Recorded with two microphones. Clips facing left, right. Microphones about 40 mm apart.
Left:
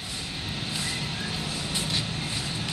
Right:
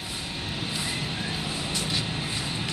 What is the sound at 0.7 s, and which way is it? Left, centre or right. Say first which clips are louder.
Vehicle: even; centre.